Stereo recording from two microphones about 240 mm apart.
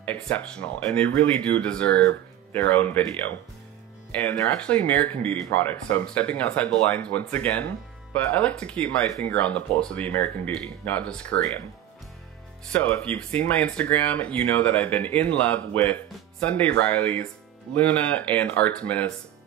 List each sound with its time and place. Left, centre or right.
0.0 s speech: centre
12.7 s speech: centre